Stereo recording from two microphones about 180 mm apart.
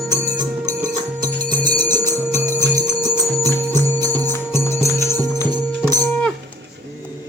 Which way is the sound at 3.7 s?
20° right (ahead or behind).